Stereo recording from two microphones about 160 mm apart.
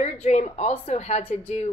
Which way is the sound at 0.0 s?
40° left (ahead or behind).